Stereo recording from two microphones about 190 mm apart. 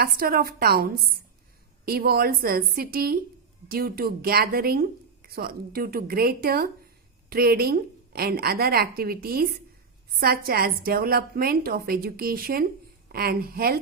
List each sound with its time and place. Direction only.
0.0 s speech: 50° right (ahead or behind)